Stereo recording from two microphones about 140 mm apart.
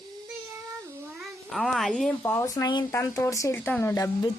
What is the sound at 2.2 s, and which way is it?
Speech, 20° left (ahead or behind).